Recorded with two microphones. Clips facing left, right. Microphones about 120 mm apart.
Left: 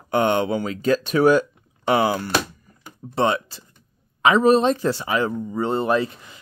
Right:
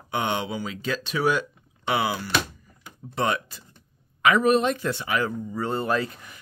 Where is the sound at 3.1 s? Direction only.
30° left (ahead or behind).